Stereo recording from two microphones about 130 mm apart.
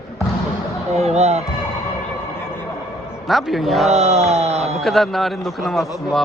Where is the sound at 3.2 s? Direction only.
Centre (ahead or behind).